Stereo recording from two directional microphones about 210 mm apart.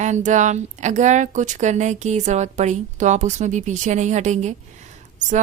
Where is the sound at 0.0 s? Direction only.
35° right (ahead or behind).